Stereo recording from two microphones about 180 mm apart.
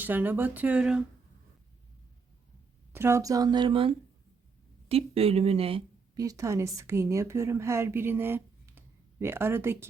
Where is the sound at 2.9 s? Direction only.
15° right (ahead or behind); by 5.8 s 30° right (ahead or behind).